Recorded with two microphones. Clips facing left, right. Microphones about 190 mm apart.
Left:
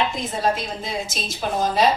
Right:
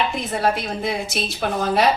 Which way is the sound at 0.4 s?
65° right (ahead or behind).